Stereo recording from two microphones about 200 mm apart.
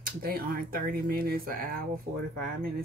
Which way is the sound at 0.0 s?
45° right (ahead or behind).